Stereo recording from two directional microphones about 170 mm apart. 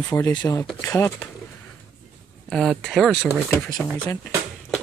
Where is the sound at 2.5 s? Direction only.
Centre (ahead or behind).